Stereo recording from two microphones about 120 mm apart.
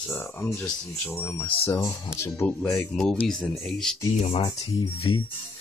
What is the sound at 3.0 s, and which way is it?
Speech, 5° left (ahead or behind).